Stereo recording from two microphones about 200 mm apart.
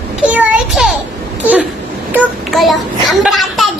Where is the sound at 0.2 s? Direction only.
5° right (ahead or behind).